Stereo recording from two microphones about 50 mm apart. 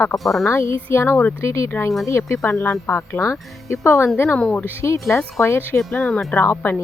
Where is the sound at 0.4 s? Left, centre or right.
Left.